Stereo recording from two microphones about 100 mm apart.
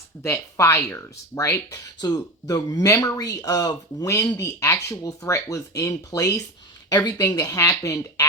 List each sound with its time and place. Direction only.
0.2 s speech: 30° left (ahead or behind)
2.0 s speech: 40° left (ahead or behind)